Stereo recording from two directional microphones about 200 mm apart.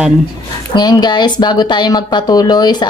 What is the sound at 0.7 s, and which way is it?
A woman's voice, 20° left (ahead or behind).